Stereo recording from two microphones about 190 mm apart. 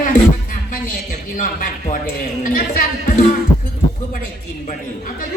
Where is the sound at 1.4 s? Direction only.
45° left (ahead or behind).